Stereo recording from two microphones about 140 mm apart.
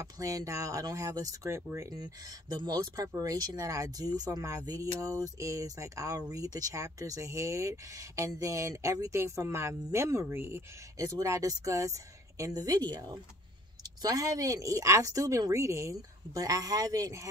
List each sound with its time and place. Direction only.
0.0 s speech: 25° right (ahead or behind)